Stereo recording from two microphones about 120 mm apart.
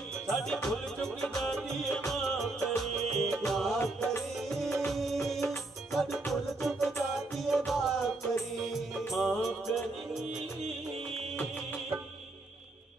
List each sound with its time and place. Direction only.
0.3 s music: 5° left (ahead or behind)
3.8 s music: 25° left (ahead or behind)
4.4 s music: centre (ahead or behind)